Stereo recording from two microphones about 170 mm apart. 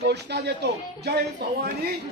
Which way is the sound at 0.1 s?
85° right.